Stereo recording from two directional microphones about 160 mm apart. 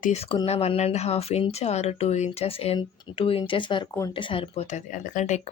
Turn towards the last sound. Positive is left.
turn(degrees=50)  # may be behind; listen again after turning